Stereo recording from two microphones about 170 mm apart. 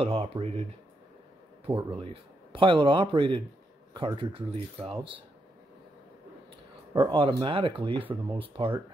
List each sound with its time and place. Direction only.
0.0 s speech: 35° right (ahead or behind)
2.5 s speech: 30° right (ahead or behind)
6.9 s speech: 30° right (ahead or behind)